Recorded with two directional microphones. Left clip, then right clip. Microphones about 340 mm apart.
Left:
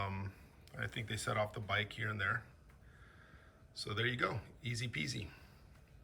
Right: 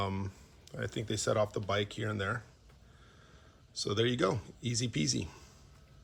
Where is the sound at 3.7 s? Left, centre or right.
Centre.